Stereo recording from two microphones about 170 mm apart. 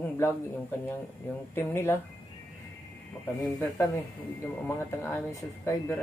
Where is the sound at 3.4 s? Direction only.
10° left (ahead or behind).